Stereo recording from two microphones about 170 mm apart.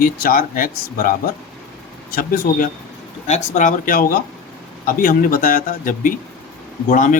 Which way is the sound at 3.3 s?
45° left (ahead or behind).